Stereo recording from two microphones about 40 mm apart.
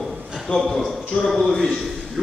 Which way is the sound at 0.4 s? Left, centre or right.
Centre.